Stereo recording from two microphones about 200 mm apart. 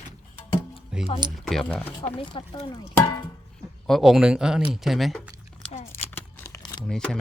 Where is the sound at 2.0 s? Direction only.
25° left (ahead or behind).